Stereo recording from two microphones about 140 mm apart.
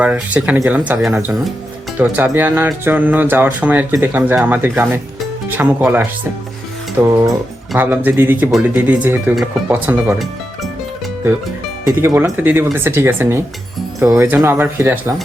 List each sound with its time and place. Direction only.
0.0 s speech: 10° right (ahead or behind)
11.9 s speech: 15° right (ahead or behind)